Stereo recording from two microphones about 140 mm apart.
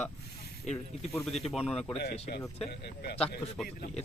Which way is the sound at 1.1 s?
Centre (ahead or behind).